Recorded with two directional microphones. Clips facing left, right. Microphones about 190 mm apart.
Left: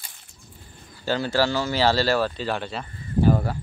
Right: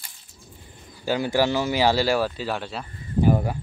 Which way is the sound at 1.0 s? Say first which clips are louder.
Right 1 dB; 15° right (ahead or behind).